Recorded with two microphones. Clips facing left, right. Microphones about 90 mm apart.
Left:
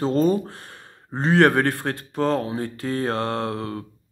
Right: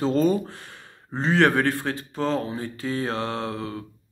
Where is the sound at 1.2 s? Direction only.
50° left (ahead or behind).